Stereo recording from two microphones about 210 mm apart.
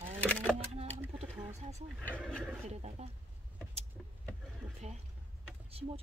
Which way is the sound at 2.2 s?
Centre (ahead or behind).